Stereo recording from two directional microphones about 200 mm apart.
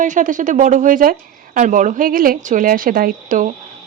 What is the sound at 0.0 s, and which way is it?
A woman's voice, 40° right (ahead or behind).